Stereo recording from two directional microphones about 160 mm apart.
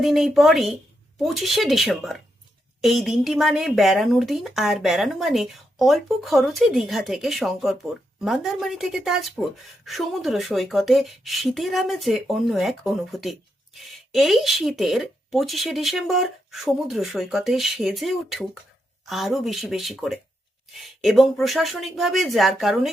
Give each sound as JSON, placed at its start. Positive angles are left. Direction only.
{"t": 0.0, "sound": "speech", "side_deg": 0}